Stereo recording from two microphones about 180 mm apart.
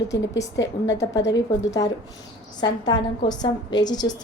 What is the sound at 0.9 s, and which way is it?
A woman's voice, 20° left (ahead or behind).